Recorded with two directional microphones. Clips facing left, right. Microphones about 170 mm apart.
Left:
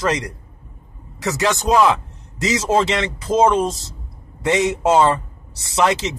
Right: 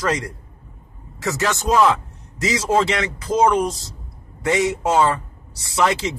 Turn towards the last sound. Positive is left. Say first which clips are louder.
# left 1 dB
turn(degrees=20)  # may be behind; listen again after turning